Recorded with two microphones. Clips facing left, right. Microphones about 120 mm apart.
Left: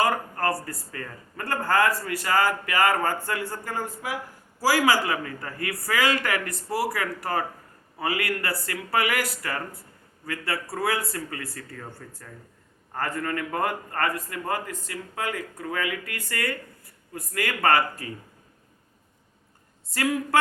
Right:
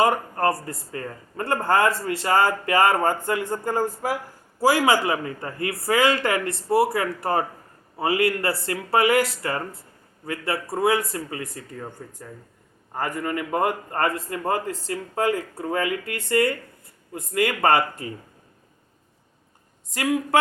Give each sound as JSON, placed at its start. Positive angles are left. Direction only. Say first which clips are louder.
{"t": 0.0, "sound": "a man's voice", "louder": "right 4 dB", "side_deg": -25}
{"t": 4.6, "sound": "a man's voice", "louder": "right 3 dB", "side_deg": -25}
{"t": 19.9, "sound": "speech", "louder": "right 2 dB", "side_deg": -20}